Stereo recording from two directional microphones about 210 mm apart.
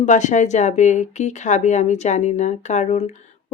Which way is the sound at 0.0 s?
35° left (ahead or behind).